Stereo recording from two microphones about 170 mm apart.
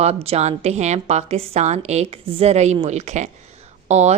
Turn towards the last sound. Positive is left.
turn(degrees=-40)  # may be behind; listen again after turning